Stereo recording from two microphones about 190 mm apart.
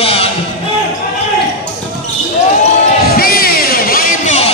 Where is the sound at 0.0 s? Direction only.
30° left (ahead or behind).